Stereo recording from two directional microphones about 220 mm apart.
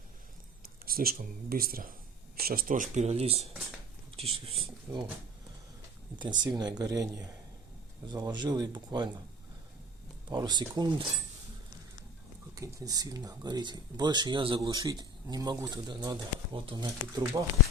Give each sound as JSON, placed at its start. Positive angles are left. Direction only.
{"t": 0.9, "sound": "speech", "side_deg": -40}
{"t": 2.9, "sound": "speech", "side_deg": -30}
{"t": 4.9, "sound": "speech", "side_deg": -10}
{"t": 6.1, "sound": "speech", "side_deg": -20}
{"t": 10.2, "sound": "speech", "side_deg": -20}
{"t": 12.5, "sound": "speech", "side_deg": -15}